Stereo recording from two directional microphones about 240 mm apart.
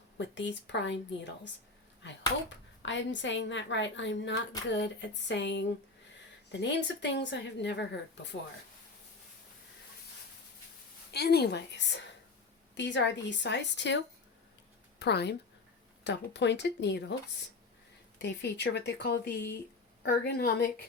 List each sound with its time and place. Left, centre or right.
0.2 s a woman's voice: left
2.8 s a woman's voice: left
11.1 s a woman's voice: left
18.2 s a woman's voice: left